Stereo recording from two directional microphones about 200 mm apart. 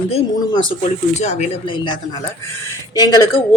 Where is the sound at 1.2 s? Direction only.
35° left (ahead or behind).